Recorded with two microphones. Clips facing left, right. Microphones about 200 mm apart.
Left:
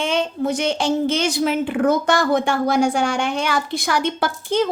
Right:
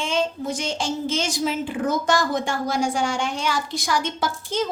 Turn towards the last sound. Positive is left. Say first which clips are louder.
# left 5 dB
turn(degrees=60)  # may be behind; listen again after turning